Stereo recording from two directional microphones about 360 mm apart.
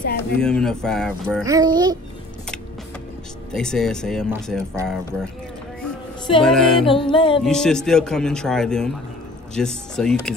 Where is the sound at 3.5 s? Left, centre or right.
Centre.